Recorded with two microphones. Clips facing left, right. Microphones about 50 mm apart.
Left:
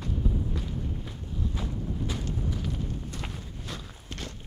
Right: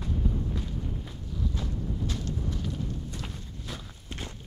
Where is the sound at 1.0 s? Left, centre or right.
Centre.